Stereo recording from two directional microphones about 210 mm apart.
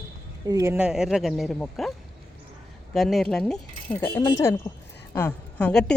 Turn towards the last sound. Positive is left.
turn(degrees=5)  # may be behind; listen again after turning